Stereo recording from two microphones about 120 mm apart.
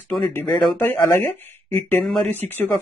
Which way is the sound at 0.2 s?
20° left (ahead or behind).